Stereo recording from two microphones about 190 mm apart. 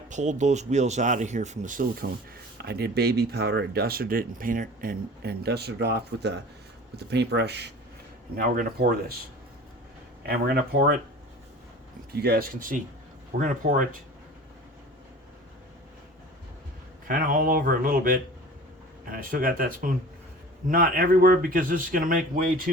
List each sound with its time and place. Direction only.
0.1 s speech: 40° right (ahead or behind)
2.6 s speech: 55° right (ahead or behind)
8.4 s speech: 50° right (ahead or behind)
10.2 s speech: 55° right (ahead or behind)
12.1 s speech: 55° right (ahead or behind)
17.1 s speech: 45° right (ahead or behind)